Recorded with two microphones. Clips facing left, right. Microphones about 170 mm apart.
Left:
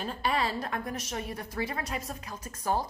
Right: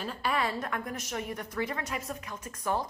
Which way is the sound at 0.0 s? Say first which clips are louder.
Left 1 dB; 30° left (ahead or behind).